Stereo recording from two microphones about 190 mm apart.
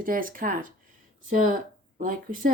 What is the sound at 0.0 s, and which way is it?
Speech, 45° right (ahead or behind).